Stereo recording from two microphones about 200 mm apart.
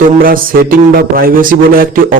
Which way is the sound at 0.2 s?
45° right (ahead or behind).